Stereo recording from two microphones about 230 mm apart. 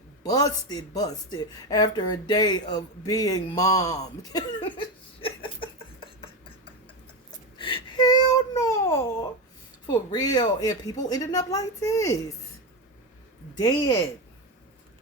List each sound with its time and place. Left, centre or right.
0.2 s speech: centre
5.2 s a sound: left
9.8 s speech: centre
13.6 s speech: centre